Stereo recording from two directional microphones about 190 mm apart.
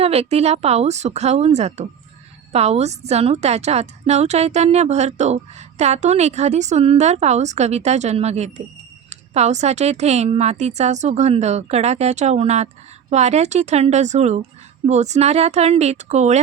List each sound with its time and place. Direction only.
0.0 s a woman's voice: 30° right (ahead or behind)